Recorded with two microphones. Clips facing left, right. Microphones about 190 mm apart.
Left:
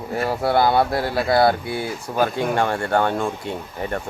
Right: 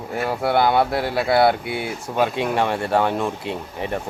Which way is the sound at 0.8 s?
5° right (ahead or behind).